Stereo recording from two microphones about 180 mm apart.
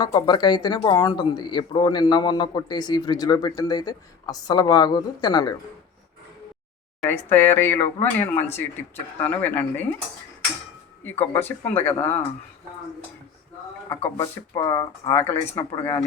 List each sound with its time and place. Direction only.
0.0 s speech: 25° left (ahead or behind)
7.0 s speech: 10° left (ahead or behind)
11.0 s speech: 10° left (ahead or behind)
14.2 s speech: 20° left (ahead or behind)